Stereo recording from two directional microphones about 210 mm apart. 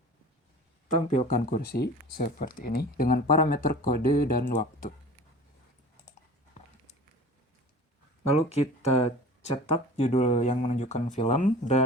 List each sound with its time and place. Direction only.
0.9 s speech: 40° left (ahead or behind)
8.3 s speech: 30° left (ahead or behind)